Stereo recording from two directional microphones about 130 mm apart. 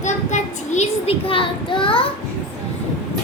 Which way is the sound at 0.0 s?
65° left (ahead or behind).